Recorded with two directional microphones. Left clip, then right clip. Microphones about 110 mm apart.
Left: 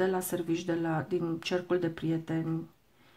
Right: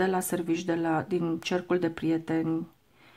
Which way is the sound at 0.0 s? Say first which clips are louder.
Right 3 dB; 20° right (ahead or behind).